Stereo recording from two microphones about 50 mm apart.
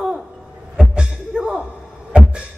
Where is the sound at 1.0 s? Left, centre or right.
Centre.